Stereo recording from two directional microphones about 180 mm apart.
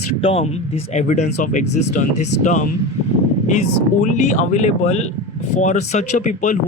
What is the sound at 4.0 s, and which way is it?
Speech, 40° left (ahead or behind).